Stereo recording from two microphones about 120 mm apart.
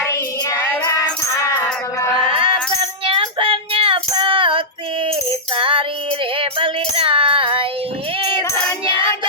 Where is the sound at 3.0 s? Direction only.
50° right (ahead or behind).